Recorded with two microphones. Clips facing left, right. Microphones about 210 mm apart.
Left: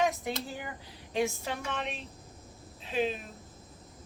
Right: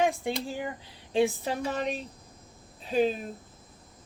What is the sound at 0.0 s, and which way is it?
Speech, 30° right (ahead or behind).